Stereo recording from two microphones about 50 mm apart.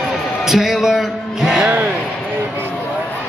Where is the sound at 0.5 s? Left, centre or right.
Centre.